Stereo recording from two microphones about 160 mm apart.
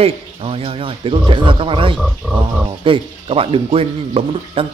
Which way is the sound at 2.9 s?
35° right (ahead or behind).